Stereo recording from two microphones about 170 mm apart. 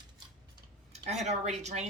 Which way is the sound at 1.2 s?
40° right (ahead or behind).